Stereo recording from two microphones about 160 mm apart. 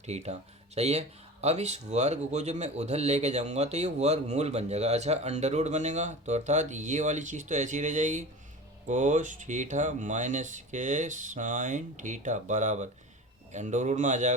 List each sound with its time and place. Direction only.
0.0 s speech: 45° right (ahead or behind)